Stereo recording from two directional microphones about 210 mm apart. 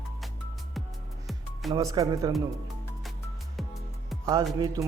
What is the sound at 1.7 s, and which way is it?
Speech, 15° right (ahead or behind).